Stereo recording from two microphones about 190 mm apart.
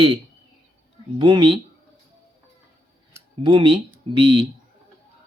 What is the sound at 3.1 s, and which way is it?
Speech, 25° right (ahead or behind).